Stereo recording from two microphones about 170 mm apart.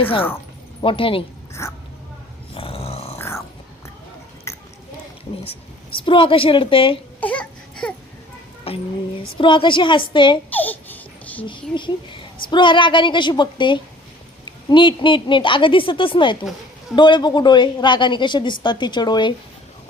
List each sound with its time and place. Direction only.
0.8 s a woman's voice: 30° left (ahead or behind)
1.6 s speech: 15° left (ahead or behind)
2.6 s dog: 35° left (ahead or behind)
3.2 s dog: 15° left (ahead or behind)
4.5 s chewing: 15° left (ahead or behind)
6.1 s a woman's voice: 30° left (ahead or behind)
7.2 s baby cry: 10° left (ahead or behind)
8.7 s a woman's voice: 35° left (ahead or behind)
10.5 s a sound: 10° left (ahead or behind)
11.4 s a woman's voice: 30° left (ahead or behind)